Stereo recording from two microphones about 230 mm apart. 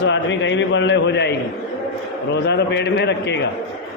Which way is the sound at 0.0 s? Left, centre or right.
Left.